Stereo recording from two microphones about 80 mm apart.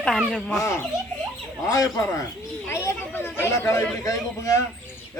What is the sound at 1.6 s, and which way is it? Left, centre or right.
Speech, left.